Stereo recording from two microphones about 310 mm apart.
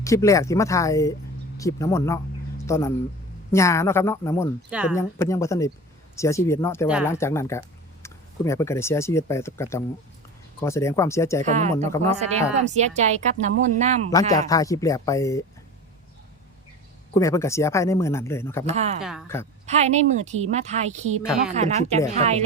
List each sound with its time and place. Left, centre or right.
0.0 s speech: centre
4.7 s speech: centre
4.9 s speech: centre
11.4 s speech: right
14.1 s speech: centre
17.2 s speech: centre
18.6 s speech: right
19.0 s speech: centre
19.6 s speech: right